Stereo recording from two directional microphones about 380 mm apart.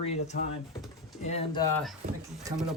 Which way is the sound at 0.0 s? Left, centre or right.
Centre.